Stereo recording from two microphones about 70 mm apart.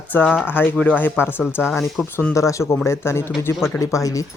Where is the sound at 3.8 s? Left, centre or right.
Left.